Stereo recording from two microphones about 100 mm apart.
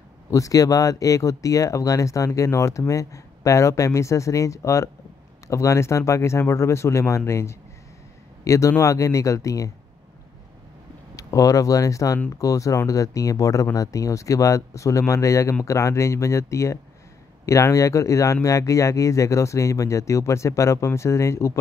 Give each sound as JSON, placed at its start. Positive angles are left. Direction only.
{"t": 0.3, "sound": "speech", "side_deg": 35}
{"t": 11.1, "sound": "speech", "side_deg": 35}